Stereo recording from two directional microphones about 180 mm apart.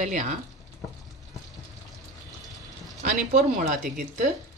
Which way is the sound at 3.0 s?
40° right (ahead or behind).